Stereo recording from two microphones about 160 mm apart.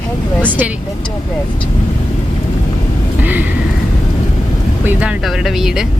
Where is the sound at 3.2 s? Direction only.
10° right (ahead or behind).